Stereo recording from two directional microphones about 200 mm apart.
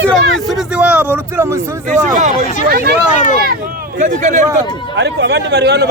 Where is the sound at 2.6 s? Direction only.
50° right (ahead or behind).